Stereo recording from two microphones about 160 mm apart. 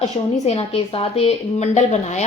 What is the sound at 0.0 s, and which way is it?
A woman's voice, 40° left (ahead or behind).